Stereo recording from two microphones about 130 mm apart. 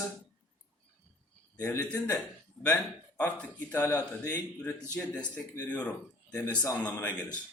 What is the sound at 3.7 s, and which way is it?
Speech, 15° left (ahead or behind).